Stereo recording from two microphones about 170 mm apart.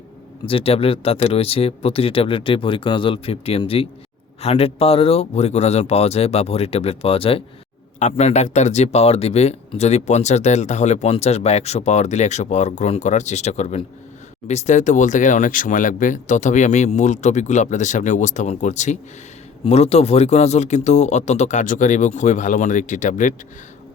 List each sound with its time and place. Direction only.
0.4 s speech: 35° left (ahead or behind); by 23.3 s 50° left (ahead or behind)